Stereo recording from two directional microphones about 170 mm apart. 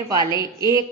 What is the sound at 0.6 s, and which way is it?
Speech, 25° left (ahead or behind).